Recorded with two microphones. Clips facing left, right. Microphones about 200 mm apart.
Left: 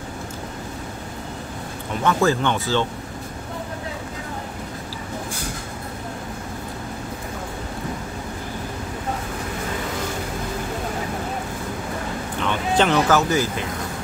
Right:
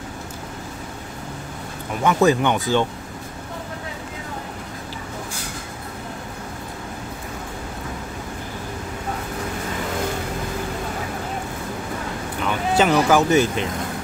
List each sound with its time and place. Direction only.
2.0 s speech: 15° right (ahead or behind)
12.4 s a sound: 5° right (ahead or behind)
13.3 s speech: 20° right (ahead or behind)